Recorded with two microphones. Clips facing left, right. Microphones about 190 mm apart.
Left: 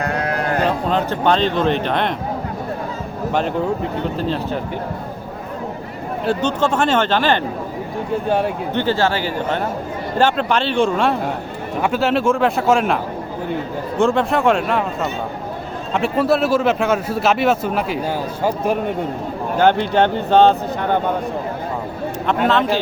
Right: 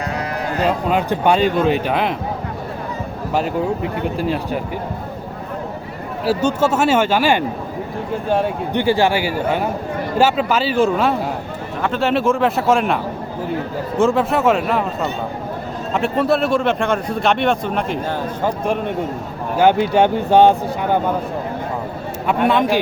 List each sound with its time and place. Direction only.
0.0 s sheep: 60° left (ahead or behind)
0.9 s speech: 10° right (ahead or behind)
4.2 s speech: 10° right (ahead or behind)
6.2 s a man's voice: 10° right (ahead or behind)
8.7 s a man's voice: 15° right (ahead or behind)
14.0 s a man's voice: centre (ahead or behind)
19.5 s speech: 10° right (ahead or behind)
22.3 s speech: 10° right (ahead or behind)